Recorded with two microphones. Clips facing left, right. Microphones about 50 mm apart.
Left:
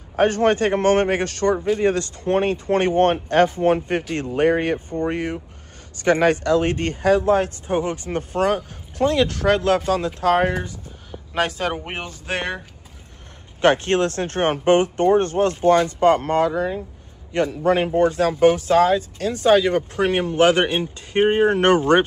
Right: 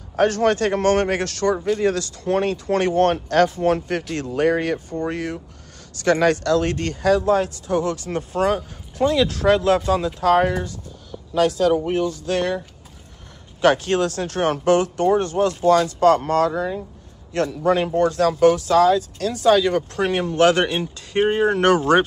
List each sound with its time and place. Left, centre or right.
0.1 s speech: centre
11.9 s speech: left
13.6 s a man's voice: left
19.1 s speech: centre